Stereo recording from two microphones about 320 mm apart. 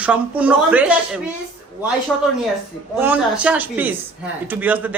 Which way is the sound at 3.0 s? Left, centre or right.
Centre.